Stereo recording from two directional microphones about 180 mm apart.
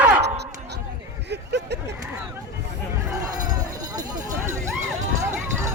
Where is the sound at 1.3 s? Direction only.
70° right (ahead or behind).